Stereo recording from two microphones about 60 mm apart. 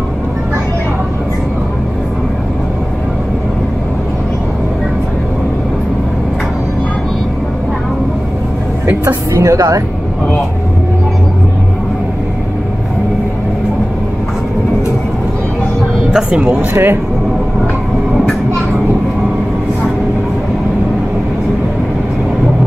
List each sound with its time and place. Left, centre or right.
9.0 s speech: right
16.1 s speech: centre
16.7 s speech: right